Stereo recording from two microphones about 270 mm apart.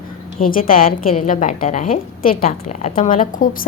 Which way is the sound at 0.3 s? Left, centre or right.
Left.